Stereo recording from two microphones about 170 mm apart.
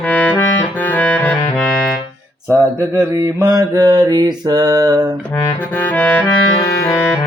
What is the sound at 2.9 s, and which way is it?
Mantra, 15° right (ahead or behind).